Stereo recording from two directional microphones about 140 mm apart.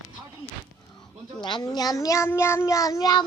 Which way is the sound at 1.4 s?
35° left (ahead or behind).